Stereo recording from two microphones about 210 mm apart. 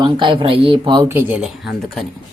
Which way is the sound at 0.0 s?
25° right (ahead or behind).